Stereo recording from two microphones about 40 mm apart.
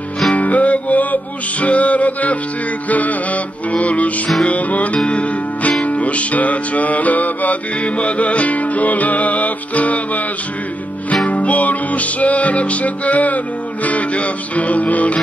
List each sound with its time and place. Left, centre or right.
0.3 s music: left
11.2 s music: left